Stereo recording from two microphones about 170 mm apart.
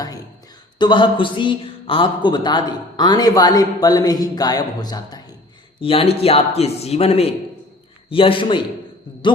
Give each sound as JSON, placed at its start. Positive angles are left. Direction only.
{"t": 0.8, "sound": "speech", "side_deg": 25}